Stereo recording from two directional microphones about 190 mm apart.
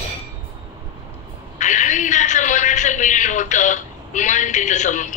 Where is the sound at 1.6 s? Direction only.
40° left (ahead or behind).